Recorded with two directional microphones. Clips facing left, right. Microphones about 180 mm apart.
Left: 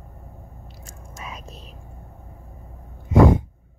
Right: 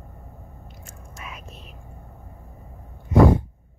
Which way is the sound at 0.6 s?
35° left (ahead or behind).